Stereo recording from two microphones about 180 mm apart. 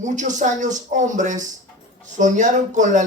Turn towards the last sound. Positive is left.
turn(degrees=-45)  # may be behind; listen again after turning